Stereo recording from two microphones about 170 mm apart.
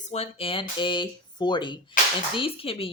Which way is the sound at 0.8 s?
30° left (ahead or behind).